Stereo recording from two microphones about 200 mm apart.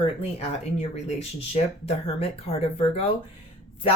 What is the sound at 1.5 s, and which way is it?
Speech, 30° left (ahead or behind).